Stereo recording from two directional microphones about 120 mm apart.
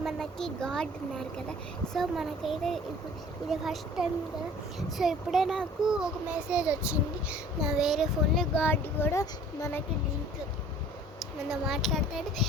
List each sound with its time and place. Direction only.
0.0 s a child's voice: 5° left (ahead or behind)
8.5 s speech: 15° left (ahead or behind)
11.2 s a child's voice: 5° right (ahead or behind)